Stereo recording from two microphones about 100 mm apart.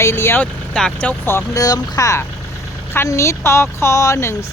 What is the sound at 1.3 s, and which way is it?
Speech, 35° left (ahead or behind).